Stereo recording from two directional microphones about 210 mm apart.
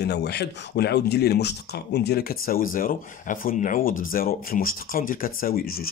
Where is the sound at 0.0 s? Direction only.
50° left (ahead or behind).